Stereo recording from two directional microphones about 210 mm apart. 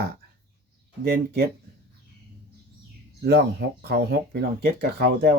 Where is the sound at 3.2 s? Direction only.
50° right (ahead or behind).